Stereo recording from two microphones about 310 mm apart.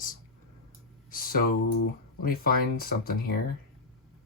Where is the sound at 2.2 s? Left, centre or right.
Left.